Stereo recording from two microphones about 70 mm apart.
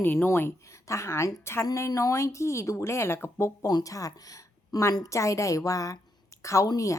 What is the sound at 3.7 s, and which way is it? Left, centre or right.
A woman's voice, left.